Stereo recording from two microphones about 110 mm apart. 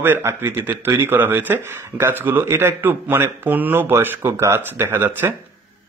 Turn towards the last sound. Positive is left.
turn(degrees=-20)  # may be behind; listen again after turning